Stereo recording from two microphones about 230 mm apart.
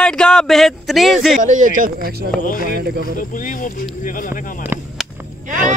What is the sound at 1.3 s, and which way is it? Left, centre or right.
Speech, right.